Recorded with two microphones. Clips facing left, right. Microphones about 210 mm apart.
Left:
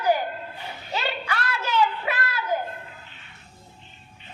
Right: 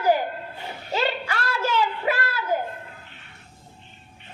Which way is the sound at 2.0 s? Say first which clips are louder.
Right 4 dB; 30° right (ahead or behind).